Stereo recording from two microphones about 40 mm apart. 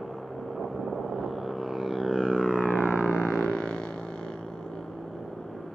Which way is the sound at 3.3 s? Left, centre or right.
Left.